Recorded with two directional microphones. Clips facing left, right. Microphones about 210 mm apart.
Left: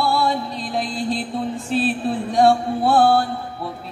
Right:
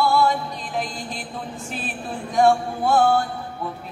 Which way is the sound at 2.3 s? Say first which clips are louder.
Left 1 dB; 35° left (ahead or behind).